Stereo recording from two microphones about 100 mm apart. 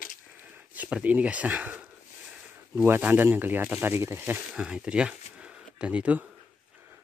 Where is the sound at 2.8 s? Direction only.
20° right (ahead or behind).